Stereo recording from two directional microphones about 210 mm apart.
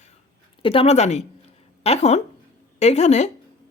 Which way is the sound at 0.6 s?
25° left (ahead or behind).